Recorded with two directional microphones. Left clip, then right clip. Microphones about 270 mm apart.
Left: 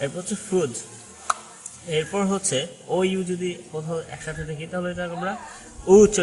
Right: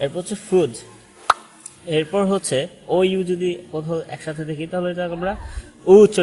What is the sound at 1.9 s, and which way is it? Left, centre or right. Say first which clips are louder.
A man's voice: right 5 dB; right.